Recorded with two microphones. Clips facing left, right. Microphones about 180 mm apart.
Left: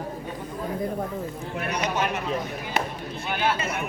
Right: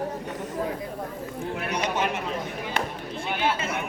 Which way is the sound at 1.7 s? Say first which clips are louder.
Left 1 dB; 25° right (ahead or behind).